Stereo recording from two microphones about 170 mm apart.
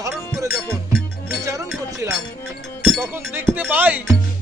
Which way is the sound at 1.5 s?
20° right (ahead or behind).